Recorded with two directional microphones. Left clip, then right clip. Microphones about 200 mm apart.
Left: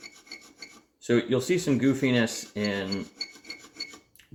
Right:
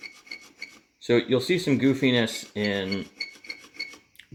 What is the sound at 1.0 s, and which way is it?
Speech, 30° right (ahead or behind).